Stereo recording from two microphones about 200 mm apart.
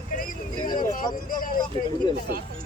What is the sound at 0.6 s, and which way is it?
Speech, 20° left (ahead or behind).